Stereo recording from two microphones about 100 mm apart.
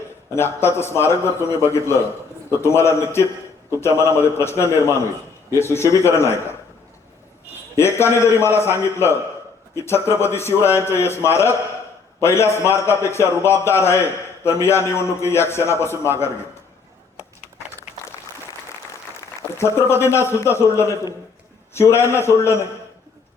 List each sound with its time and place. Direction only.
0.3 s a man's voice: 25° left (ahead or behind)
7.8 s a man's voice: 25° left (ahead or behind)
19.5 s a man's voice: 25° left (ahead or behind)